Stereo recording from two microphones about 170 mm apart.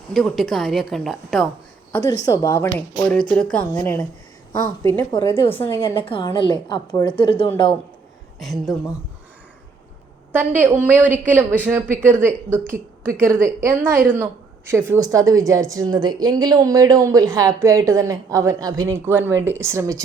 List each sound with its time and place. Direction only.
0.1 s a woman's voice: centre (ahead or behind)
1.9 s a woman's voice: 20° left (ahead or behind)
5.1 s a woman's voice: 25° left (ahead or behind)
5.5 s speech: 15° left (ahead or behind)
6.0 s a woman's voice: 30° left (ahead or behind)
8.4 s a woman's voice: centre (ahead or behind)
10.3 s a woman's voice: 10° right (ahead or behind)